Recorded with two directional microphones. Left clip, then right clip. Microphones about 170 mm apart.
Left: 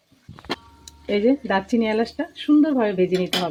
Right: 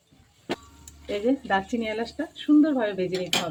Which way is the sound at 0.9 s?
50° left (ahead or behind).